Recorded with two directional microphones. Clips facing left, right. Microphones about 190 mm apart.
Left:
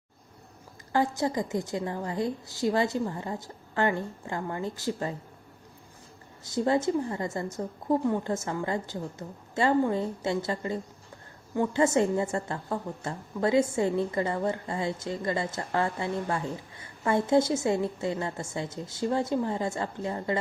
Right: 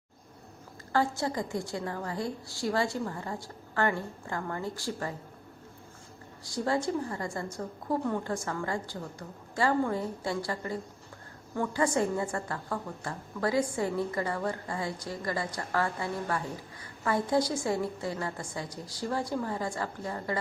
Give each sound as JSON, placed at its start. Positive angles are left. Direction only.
{"t": 0.9, "sound": "a woman's voice", "side_deg": 15}
{"t": 6.4, "sound": "a woman's voice", "side_deg": 20}